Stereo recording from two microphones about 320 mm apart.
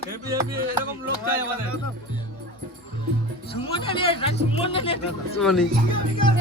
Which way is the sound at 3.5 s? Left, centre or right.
Centre.